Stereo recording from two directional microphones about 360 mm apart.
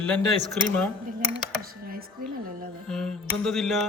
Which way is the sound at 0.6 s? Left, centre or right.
Centre.